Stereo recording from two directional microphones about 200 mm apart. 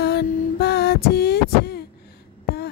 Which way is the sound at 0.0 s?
55° left (ahead or behind).